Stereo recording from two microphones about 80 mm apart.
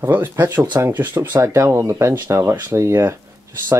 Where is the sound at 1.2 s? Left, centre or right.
Right.